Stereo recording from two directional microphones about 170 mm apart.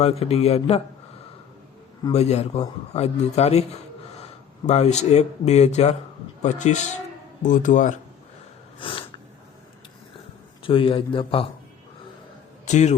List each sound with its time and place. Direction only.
0.0 s a man's voice: 35° left (ahead or behind)
2.1 s a man's voice: 40° left (ahead or behind)
8.8 s snort: 30° left (ahead or behind)
10.6 s a man's voice: 30° left (ahead or behind)
12.6 s a man's voice: 45° left (ahead or behind)